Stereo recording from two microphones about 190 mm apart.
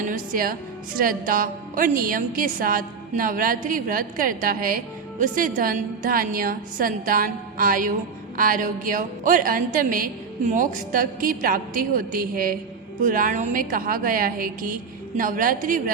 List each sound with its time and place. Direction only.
0.1 s a woman's voice: 50° right (ahead or behind)